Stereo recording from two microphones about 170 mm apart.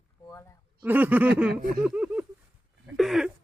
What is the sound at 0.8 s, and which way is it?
Speech, 10° right (ahead or behind).